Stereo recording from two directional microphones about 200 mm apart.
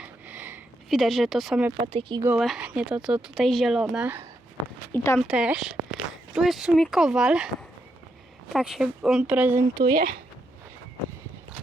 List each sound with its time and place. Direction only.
0.0 s a sound: 10° right (ahead or behind)
1.7 s speech: 25° right (ahead or behind)
2.2 s speech: 5° right (ahead or behind)
4.9 s speech: 10° left (ahead or behind)
5.3 s speech: 5° right (ahead or behind)
8.5 s speech: centre (ahead or behind)
9.8 s speech: 50° right (ahead or behind)